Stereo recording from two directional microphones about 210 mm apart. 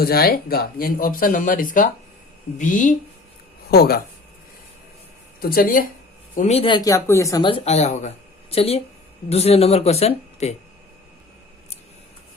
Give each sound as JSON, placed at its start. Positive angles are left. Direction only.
{"t": 0.0, "sound": "speech", "side_deg": 45}
{"t": 5.4, "sound": "speech", "side_deg": 45}
{"t": 6.3, "sound": "speech", "side_deg": 30}